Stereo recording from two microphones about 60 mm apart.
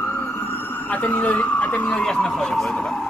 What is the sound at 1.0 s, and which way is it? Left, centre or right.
Speech, left.